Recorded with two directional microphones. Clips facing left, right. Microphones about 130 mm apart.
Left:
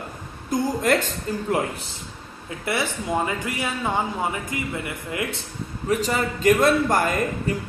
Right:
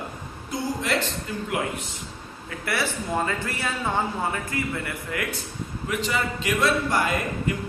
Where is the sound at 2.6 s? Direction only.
20° left (ahead or behind).